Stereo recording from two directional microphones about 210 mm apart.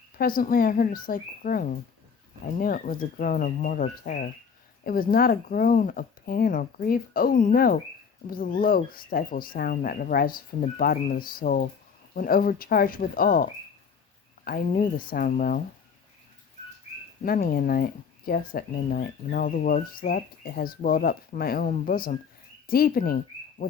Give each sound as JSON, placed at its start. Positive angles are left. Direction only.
{"t": 0.2, "sound": "speech", "side_deg": 45}
{"t": 17.2, "sound": "speech", "side_deg": 45}